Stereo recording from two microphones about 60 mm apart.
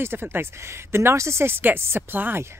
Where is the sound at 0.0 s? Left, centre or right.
Right.